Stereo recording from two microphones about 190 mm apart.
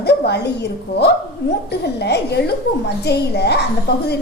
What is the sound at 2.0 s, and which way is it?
A woman's voice, 60° left (ahead or behind).